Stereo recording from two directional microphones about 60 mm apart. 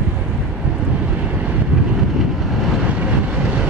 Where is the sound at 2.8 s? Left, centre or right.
Centre.